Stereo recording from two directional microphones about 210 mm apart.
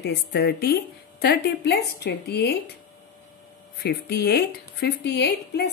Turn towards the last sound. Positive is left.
turn(degrees=50)  # may be behind; listen again after turning